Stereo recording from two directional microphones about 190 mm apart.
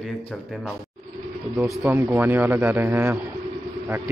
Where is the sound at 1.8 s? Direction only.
5° right (ahead or behind).